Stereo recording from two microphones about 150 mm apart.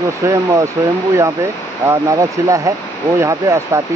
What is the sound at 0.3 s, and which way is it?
Speech, 20° right (ahead or behind).